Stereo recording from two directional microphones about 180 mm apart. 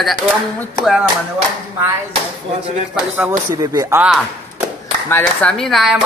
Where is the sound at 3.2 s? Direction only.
15° right (ahead or behind).